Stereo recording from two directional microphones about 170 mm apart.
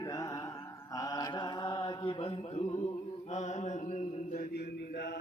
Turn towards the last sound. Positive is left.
turn(degrees=80)